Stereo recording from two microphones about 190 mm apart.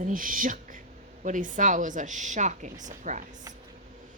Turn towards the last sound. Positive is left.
turn(degrees=-40)  # may be behind; listen again after turning